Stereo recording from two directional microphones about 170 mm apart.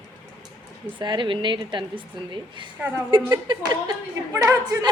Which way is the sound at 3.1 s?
25° right (ahead or behind).